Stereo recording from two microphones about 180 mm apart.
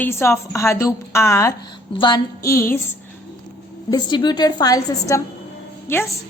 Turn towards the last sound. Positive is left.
turn(degrees=15)  # may be behind; listen again after turning